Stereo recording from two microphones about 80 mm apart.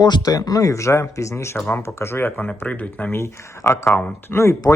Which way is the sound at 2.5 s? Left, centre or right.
Centre.